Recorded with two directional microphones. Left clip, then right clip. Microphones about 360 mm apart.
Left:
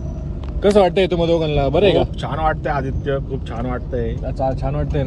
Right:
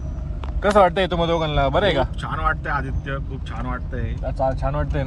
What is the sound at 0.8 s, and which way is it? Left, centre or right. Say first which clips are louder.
Speech: left 3 dB; right.